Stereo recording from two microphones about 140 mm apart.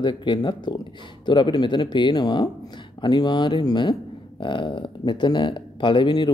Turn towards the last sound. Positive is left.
turn(degrees=35)  # may be behind; listen again after turning